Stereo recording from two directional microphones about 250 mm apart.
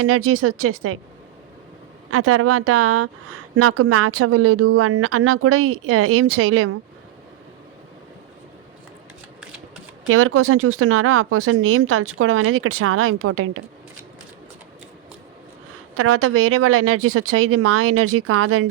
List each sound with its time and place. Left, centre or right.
0.0 s speech: right
2.0 s speech: right
10.1 s speech: right
16.0 s speech: right